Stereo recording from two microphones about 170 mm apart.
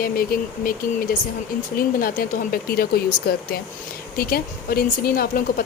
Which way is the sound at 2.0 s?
55° left (ahead or behind).